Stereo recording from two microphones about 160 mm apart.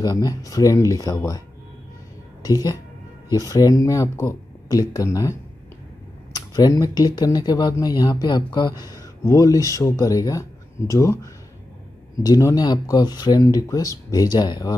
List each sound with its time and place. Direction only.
0.0 s speech: 20° left (ahead or behind)
2.4 s speech: 20° left (ahead or behind)
12.2 s speech: 20° left (ahead or behind)